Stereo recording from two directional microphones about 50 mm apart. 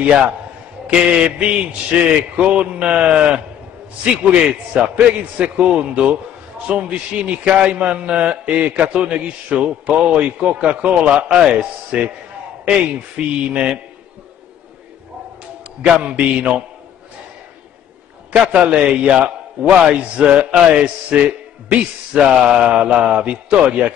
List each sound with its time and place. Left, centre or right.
0.0 s a man's voice: right
13.5 s a man's voice: right
15.8 s a man's voice: right
18.3 s a man's voice: centre